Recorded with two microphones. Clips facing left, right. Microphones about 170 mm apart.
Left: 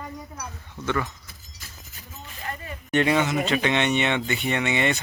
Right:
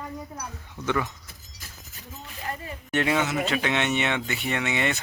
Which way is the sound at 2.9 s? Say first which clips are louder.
Left 3 dB; 5° right (ahead or behind).